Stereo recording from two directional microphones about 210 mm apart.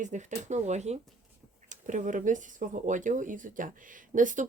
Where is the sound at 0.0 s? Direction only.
35° right (ahead or behind).